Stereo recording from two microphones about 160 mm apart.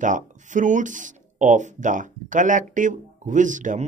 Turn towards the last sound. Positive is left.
turn(degrees=-50)  # may be behind; listen again after turning